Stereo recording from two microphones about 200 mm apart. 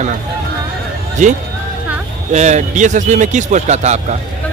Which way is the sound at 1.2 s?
35° right (ahead or behind).